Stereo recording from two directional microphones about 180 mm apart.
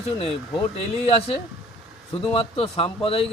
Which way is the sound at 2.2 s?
30° left (ahead or behind).